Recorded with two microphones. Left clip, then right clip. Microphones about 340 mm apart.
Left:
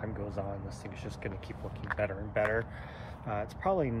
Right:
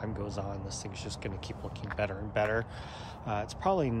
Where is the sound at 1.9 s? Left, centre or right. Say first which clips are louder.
Even; centre.